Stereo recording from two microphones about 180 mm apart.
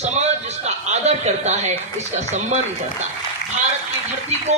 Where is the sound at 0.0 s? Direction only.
35° right (ahead or behind).